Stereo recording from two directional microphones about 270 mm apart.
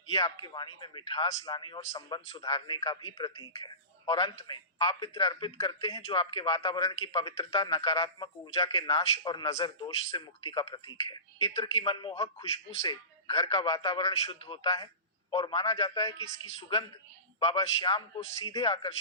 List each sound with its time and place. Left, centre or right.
0.1 s a man's voice: centre